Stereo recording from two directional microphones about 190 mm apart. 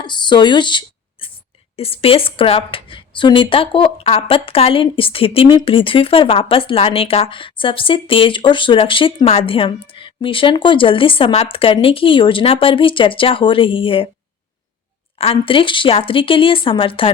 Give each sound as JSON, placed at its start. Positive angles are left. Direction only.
{"t": 0.0, "sound": "a sound", "side_deg": 25}
{"t": 1.7, "sound": "a woman's voice", "side_deg": 30}
{"t": 15.2, "sound": "a woman's voice", "side_deg": 30}